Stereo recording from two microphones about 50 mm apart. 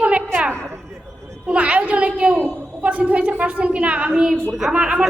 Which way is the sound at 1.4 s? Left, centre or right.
Right.